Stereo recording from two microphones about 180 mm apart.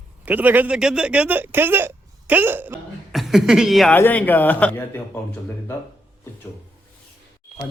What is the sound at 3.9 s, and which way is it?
A man's voice, 10° left (ahead or behind).